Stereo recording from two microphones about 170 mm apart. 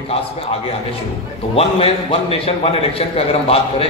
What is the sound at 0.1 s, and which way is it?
A man's voice, 35° left (ahead or behind).